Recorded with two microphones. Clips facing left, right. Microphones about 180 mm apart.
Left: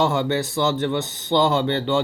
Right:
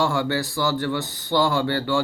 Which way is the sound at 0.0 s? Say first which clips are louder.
Left 2 dB; 20° left (ahead or behind).